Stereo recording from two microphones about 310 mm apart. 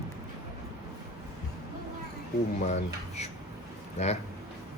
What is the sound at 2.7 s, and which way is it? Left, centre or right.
A man's voice, left.